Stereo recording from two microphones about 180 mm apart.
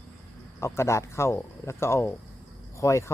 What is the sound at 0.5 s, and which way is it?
Speech, 15° left (ahead or behind).